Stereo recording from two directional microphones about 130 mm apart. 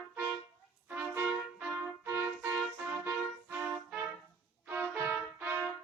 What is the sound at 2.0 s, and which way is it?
Music, 20° right (ahead or behind).